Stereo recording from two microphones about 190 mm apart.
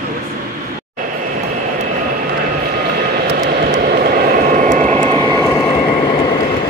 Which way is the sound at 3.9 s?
45° right (ahead or behind).